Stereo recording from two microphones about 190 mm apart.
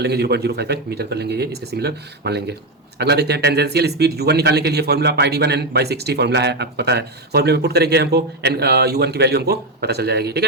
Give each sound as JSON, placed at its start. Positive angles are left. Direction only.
{"t": 0.0, "sound": "speech", "side_deg": -60}